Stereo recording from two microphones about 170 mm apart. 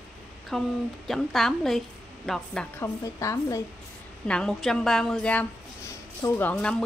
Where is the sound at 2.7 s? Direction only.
20° left (ahead or behind).